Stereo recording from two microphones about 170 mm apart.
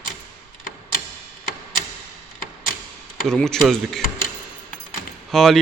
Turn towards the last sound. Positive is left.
turn(degrees=0)  # may be behind; listen again after turning